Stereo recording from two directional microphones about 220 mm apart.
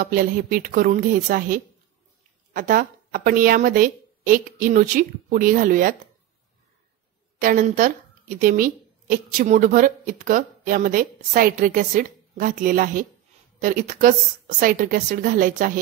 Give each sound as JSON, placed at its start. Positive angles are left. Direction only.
{"t": 0.0, "sound": "speech", "side_deg": -40}
{"t": 7.3, "sound": "speech", "side_deg": -35}